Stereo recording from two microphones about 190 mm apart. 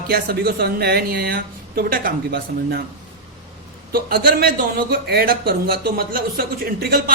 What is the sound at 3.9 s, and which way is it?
Speech, 55° right (ahead or behind).